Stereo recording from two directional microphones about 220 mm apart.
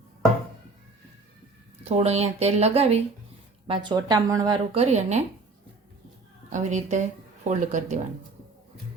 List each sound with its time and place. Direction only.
1.8 s speech: 30° right (ahead or behind)
6.5 s speech: 35° right (ahead or behind)